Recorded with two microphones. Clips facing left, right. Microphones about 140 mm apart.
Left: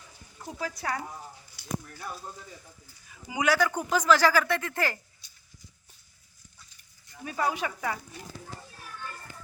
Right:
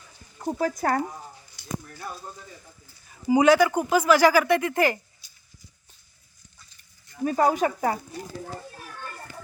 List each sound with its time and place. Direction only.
0.4 s speech: 50° right (ahead or behind)
1.5 s a sound: 5° left (ahead or behind)
3.1 s a man's voice: 35° right (ahead or behind)
3.6 s speech: 10° right (ahead or behind)
5.2 s horse: centre (ahead or behind)
7.3 s speech: 45° right (ahead or behind)